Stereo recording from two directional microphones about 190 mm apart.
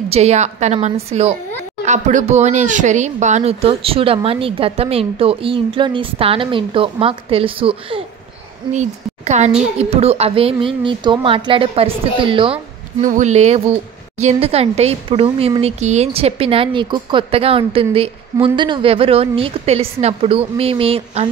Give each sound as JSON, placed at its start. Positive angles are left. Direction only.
{"t": 0.1, "sound": "speech", "side_deg": -35}
{"t": 13.0, "sound": "speech", "side_deg": -40}